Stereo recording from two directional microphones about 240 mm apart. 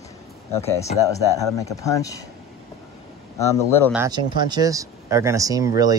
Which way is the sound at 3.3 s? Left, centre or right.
Centre.